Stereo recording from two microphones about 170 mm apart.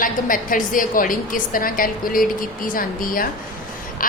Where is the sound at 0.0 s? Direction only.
55° left (ahead or behind).